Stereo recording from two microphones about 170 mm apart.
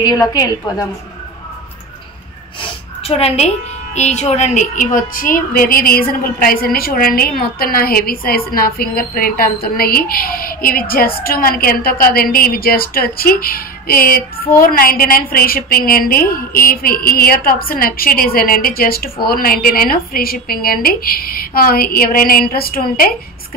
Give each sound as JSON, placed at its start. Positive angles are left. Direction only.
{"t": 0.0, "sound": "a woman's voice", "side_deg": 20}
{"t": 3.0, "sound": "a woman's voice", "side_deg": 35}